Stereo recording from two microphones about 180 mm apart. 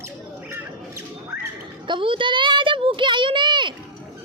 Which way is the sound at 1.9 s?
30° right (ahead or behind).